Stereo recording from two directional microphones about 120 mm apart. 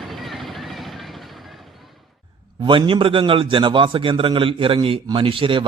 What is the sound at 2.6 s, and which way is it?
A man's voice, 45° right (ahead or behind).